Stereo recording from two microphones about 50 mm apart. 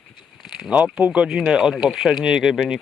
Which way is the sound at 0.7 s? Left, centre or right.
Right.